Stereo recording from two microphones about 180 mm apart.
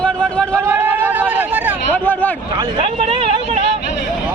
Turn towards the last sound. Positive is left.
turn(degrees=-35)  # may be behind; listen again after turning